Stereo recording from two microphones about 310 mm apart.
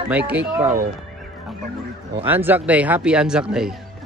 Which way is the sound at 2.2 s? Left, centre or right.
Centre.